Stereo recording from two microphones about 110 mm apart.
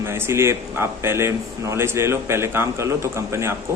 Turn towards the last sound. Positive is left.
turn(degrees=-25)  # may be behind; listen again after turning